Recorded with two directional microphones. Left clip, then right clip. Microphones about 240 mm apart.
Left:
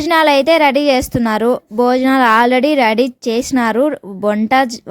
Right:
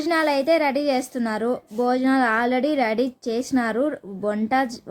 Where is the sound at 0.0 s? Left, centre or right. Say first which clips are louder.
Left 10 dB; left.